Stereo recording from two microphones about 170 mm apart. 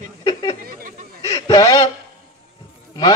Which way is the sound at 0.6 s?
60° right (ahead or behind).